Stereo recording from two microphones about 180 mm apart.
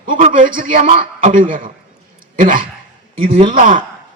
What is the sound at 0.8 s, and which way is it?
Speech, 35° right (ahead or behind).